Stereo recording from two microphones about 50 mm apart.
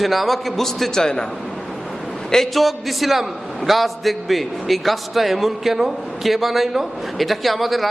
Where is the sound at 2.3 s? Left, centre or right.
Centre.